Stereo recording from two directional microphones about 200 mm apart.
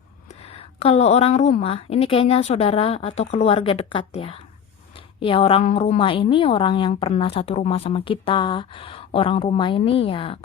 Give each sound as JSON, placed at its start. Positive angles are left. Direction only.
{"t": 0.3, "sound": "a woman's voice", "side_deg": 30}